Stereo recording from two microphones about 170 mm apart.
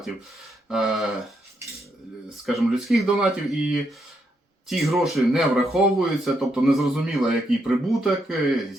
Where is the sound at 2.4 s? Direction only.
Centre (ahead or behind).